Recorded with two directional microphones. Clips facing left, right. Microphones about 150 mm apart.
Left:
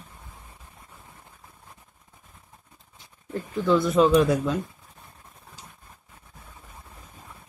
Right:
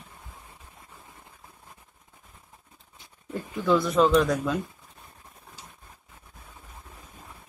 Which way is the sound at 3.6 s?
Centre (ahead or behind).